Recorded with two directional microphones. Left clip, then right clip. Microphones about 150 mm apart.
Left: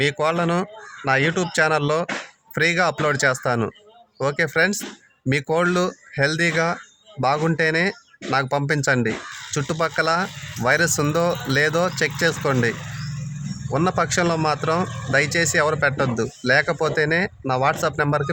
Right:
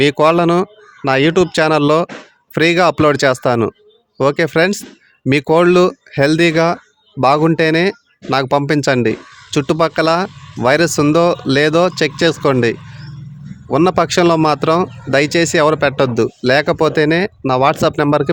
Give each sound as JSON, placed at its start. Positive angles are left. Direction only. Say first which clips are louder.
{"t": 0.0, "sound": "a man's voice", "louder": "right 9 dB", "side_deg": -60}